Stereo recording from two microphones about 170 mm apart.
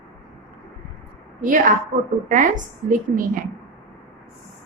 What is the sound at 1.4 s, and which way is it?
A woman's voice, 50° right (ahead or behind).